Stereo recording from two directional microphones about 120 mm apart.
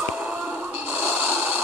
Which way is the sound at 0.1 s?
10° right (ahead or behind).